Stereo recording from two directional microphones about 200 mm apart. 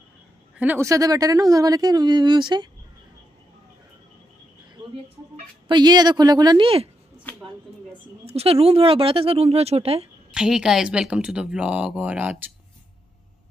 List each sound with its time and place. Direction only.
0.6 s speech: 10° right (ahead or behind)
5.3 s speech: 20° right (ahead or behind)
8.3 s speech: 30° right (ahead or behind)
10.3 s speech: 5° right (ahead or behind)